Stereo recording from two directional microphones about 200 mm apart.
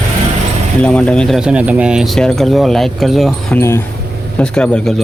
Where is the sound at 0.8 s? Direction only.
5° left (ahead or behind).